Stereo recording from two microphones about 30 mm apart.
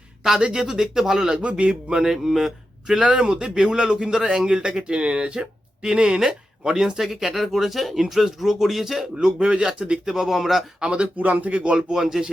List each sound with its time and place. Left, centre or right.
0.5 s speech: centre
1.3 s speech: right
2.0 s speech: centre
3.1 s a man's voice: right
4.1 s speech: centre
5.8 s a man's voice: centre
7.0 s speech: centre
9.1 s a man's voice: right
10.1 s speech: centre
10.8 s speech: right
11.0 s speech: right
11.5 s speech: right
11.9 s speech: centre